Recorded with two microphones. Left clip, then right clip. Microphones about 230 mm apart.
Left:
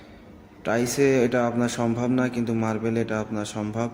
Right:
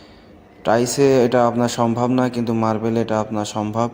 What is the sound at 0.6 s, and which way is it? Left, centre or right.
Speech, centre.